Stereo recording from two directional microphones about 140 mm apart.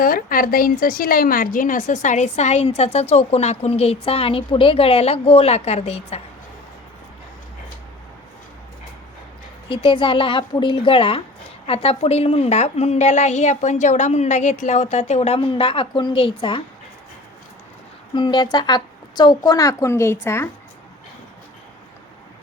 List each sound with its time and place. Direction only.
0.0 s a woman's voice: 90° left; by 6.2 s 50° left (ahead or behind)
9.6 s a woman's voice: 40° left (ahead or behind)
18.1 s a woman's voice: 35° left (ahead or behind)